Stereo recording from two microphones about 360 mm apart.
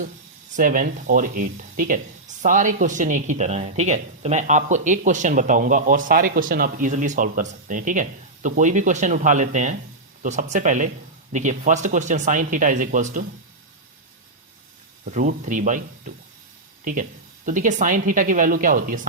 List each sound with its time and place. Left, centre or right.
0.5 s speech: right
15.0 s speech: right